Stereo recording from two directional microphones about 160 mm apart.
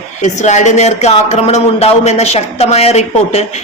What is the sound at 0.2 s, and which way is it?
A woman's voice, 50° left (ahead or behind).